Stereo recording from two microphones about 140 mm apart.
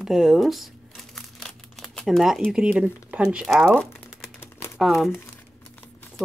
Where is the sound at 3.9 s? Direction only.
15° left (ahead or behind).